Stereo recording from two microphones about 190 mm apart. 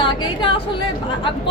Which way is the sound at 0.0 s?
25° left (ahead or behind).